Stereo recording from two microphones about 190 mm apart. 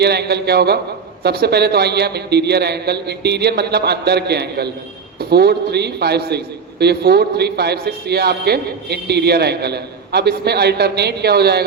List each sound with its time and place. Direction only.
0.0 s a man's voice: 60° right (ahead or behind)